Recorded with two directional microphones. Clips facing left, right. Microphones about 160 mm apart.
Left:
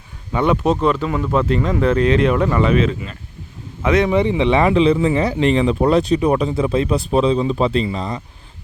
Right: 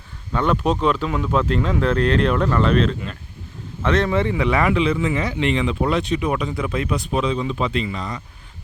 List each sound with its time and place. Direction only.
0.3 s speech: 10° left (ahead or behind); by 8.2 s 30° left (ahead or behind)